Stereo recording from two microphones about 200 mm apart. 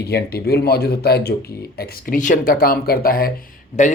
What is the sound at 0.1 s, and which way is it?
Speech, 50° left (ahead or behind).